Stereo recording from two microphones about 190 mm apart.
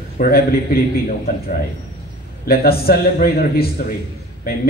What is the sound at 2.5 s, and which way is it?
A man's voice, 55° left (ahead or behind).